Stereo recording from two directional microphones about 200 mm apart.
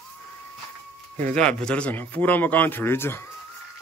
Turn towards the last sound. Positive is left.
turn(degrees=10)  # may be behind; listen again after turning